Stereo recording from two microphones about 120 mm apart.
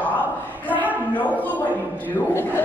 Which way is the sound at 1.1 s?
15° left (ahead or behind).